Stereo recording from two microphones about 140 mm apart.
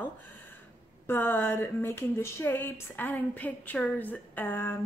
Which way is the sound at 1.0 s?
15° left (ahead or behind).